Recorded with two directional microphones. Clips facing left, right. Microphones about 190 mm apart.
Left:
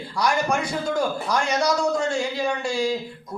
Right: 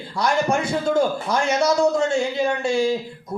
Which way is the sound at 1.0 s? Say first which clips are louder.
Right 3 dB; 25° right (ahead or behind).